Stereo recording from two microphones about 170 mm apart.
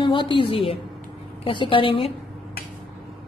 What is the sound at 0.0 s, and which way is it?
A woman's voice, 25° left (ahead or behind).